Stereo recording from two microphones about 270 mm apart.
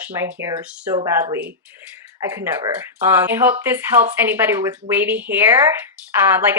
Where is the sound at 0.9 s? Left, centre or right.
Centre.